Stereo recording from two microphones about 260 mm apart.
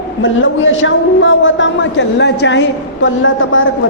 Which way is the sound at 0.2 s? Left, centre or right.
Left.